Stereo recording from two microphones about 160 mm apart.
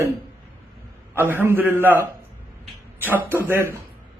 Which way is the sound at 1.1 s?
15° right (ahead or behind).